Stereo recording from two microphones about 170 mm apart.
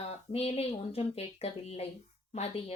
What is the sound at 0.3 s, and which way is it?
A woman's voice, 35° left (ahead or behind).